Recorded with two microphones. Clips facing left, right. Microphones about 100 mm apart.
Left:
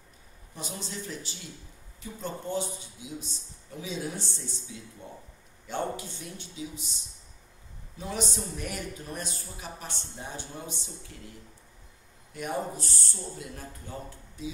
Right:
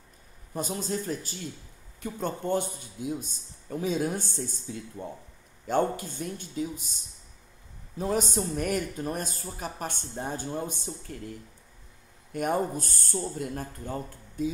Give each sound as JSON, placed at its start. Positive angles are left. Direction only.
{"t": 0.6, "sound": "speech", "side_deg": -45}
{"t": 8.0, "sound": "speech", "side_deg": -45}